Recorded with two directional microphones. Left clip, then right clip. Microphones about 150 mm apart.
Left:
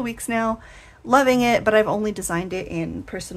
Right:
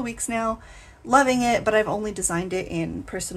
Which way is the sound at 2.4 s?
20° left (ahead or behind).